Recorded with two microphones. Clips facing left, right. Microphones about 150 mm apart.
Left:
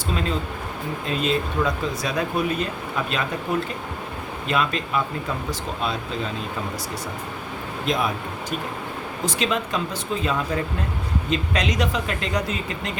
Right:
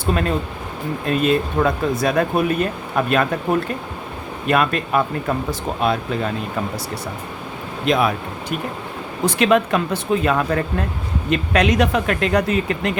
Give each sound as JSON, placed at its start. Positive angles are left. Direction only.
{"t": 0.0, "sound": "speech", "side_deg": -55}
{"t": 4.4, "sound": "speech", "side_deg": -55}
{"t": 7.9, "sound": "speech", "side_deg": -70}
{"t": 9.2, "sound": "speech", "side_deg": -60}